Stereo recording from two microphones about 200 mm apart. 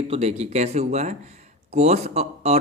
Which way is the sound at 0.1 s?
30° right (ahead or behind).